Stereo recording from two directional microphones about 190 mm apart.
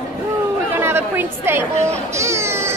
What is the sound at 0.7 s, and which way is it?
Chatter, 15° right (ahead or behind).